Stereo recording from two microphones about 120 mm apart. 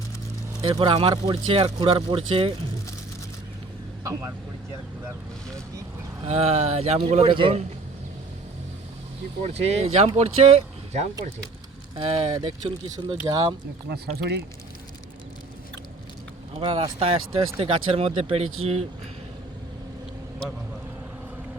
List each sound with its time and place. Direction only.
0.6 s speech: 45° right (ahead or behind)
4.0 s speech: 25° right (ahead or behind)
6.2 s speech: 60° right (ahead or behind)
7.3 s speech: 45° right (ahead or behind)
9.4 s speech: 60° right (ahead or behind)
11.9 s speech: 45° right (ahead or behind)
13.2 s speech: 35° right (ahead or behind)
16.6 s speech: 45° right (ahead or behind)